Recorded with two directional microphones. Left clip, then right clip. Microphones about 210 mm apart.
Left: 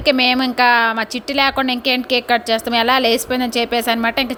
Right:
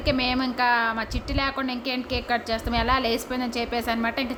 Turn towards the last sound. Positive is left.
turn(degrees=35)  # may be behind; listen again after turning